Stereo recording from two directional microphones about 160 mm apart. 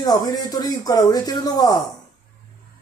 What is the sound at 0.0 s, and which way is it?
Speech, 25° left (ahead or behind).